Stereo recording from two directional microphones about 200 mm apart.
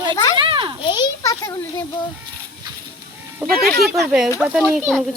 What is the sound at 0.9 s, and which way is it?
Speech, 20° left (ahead or behind).